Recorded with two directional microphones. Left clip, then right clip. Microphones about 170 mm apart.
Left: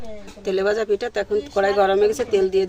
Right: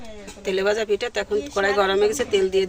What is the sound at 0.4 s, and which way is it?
Speech, 45° left (ahead or behind).